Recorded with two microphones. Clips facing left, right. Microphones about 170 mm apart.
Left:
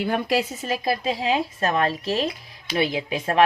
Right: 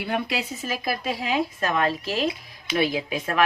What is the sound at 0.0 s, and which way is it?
A woman's voice, 45° left (ahead or behind).